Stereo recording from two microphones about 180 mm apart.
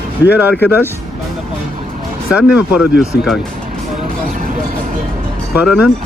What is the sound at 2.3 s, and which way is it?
Speech, 5° right (ahead or behind).